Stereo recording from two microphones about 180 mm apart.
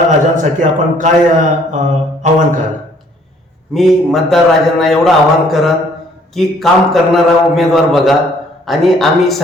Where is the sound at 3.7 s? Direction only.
Centre (ahead or behind).